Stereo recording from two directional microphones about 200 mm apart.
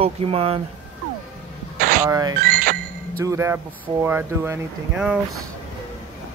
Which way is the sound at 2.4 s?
40° right (ahead or behind).